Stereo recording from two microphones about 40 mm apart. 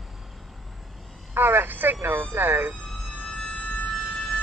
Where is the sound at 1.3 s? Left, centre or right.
Right.